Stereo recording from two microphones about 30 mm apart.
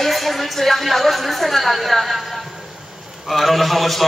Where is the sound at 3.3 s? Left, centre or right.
Centre.